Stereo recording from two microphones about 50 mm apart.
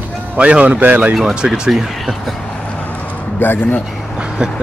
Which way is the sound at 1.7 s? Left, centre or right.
Centre.